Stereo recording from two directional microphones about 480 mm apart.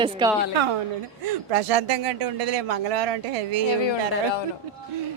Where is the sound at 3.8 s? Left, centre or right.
Left.